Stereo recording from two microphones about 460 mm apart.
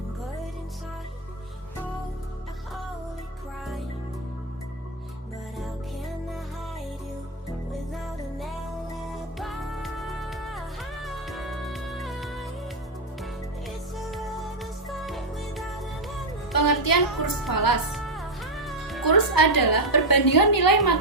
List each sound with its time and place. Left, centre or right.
7.9 s music: centre
13.7 s music: centre
16.5 s music: left
17.5 s a woman's voice: left
17.9 s music: centre
19.0 s a woman's voice: left